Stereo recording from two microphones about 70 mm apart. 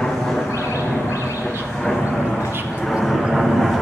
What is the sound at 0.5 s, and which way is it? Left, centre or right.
Vehicle, left.